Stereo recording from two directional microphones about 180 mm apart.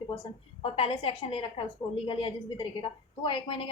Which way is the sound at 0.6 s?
30° left (ahead or behind).